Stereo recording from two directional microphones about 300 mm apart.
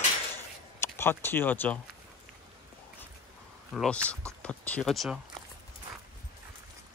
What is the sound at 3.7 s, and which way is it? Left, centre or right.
Speech, centre.